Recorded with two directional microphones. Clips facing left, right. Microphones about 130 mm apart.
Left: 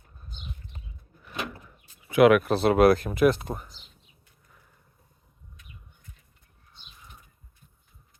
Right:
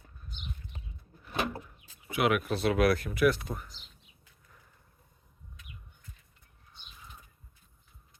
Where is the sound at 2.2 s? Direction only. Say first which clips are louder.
Left 10 dB; 75° left (ahead or behind).